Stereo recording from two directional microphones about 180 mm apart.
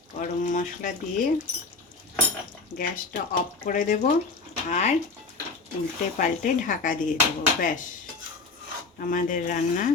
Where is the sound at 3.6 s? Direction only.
45° left (ahead or behind).